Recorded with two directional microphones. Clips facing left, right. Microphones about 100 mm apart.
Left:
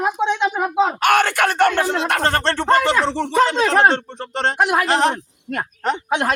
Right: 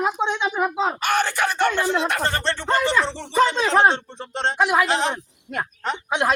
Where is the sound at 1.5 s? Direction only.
55° left (ahead or behind).